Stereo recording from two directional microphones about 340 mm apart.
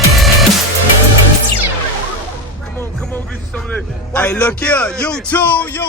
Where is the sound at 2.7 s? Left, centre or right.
Centre.